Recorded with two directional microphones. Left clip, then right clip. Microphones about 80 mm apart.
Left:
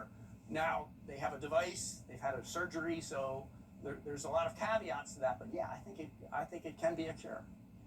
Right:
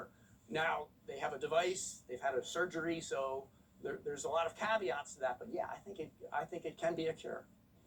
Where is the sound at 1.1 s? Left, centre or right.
Right.